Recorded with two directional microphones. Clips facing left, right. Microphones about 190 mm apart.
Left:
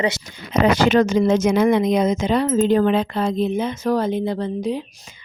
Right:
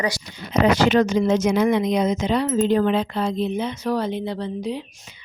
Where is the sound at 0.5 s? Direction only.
55° left (ahead or behind).